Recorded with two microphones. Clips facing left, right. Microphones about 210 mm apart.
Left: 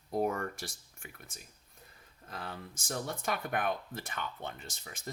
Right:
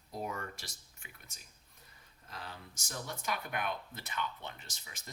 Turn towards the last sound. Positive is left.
turn(degrees=50)  # may be behind; listen again after turning